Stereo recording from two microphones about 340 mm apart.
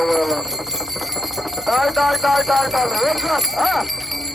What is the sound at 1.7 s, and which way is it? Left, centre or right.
Jingle bell, centre.